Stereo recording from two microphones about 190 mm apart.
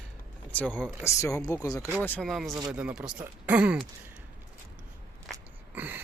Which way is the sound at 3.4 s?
5° right (ahead or behind).